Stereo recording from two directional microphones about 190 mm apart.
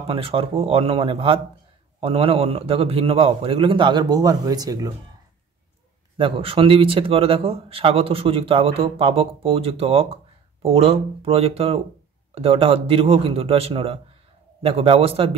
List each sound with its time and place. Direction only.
0.0 s speech: 30° right (ahead or behind)
6.1 s a man's voice: 30° right (ahead or behind)